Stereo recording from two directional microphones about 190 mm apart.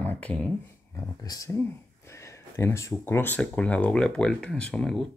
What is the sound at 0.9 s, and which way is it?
Speech, 20° left (ahead or behind).